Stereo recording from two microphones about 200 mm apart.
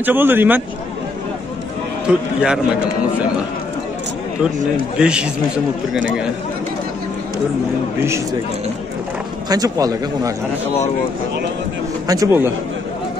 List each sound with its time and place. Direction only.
0.0 s speech: 10° right (ahead or behind)
2.0 s a man's voice: 5° right (ahead or behind)
4.9 s a man's voice: 5° right (ahead or behind)
9.5 s speech: 20° right (ahead or behind)
12.1 s speech: 15° right (ahead or behind)